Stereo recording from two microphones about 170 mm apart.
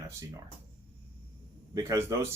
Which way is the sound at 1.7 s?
20° right (ahead or behind).